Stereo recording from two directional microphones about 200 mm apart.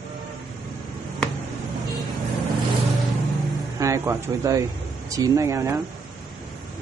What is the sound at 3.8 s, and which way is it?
Speech, 15° right (ahead or behind).